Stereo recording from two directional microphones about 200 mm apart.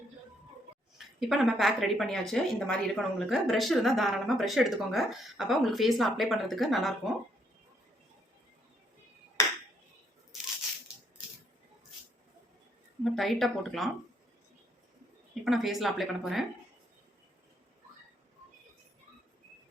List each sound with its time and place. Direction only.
0.9 s a woman's voice: centre (ahead or behind)
13.1 s a woman's voice: centre (ahead or behind)
15.4 s a woman's voice: centre (ahead or behind)